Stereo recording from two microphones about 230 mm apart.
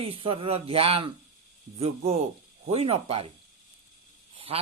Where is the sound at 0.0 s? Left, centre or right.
Right.